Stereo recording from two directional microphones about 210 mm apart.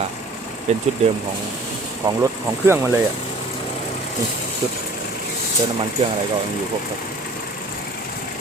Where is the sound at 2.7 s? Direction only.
10° right (ahead or behind).